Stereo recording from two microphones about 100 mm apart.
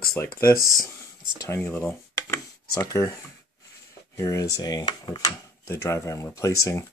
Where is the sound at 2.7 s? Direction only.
40° left (ahead or behind).